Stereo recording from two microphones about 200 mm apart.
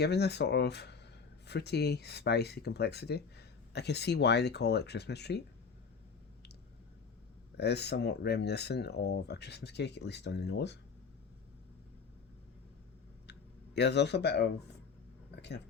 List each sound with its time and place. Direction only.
0.0 s speech: 55° left (ahead or behind)
7.5 s speech: 55° left (ahead or behind)
13.7 s speech: 60° left (ahead or behind)